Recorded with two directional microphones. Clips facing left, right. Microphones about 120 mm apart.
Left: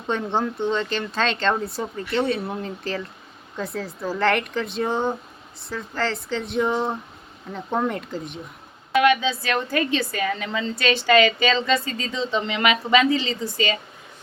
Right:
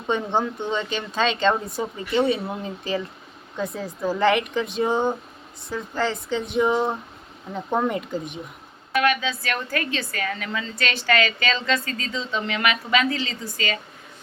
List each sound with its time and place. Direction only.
0.1 s speech: 5° right (ahead or behind)
8.9 s a woman's voice: 25° left (ahead or behind)